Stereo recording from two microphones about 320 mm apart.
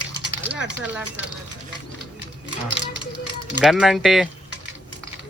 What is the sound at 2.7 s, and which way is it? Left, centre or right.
Speech, right.